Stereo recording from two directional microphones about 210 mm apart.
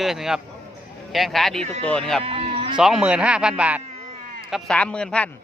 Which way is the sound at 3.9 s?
30° right (ahead or behind).